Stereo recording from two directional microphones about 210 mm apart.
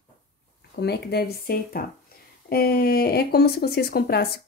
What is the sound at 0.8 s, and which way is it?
Speech, 50° left (ahead or behind).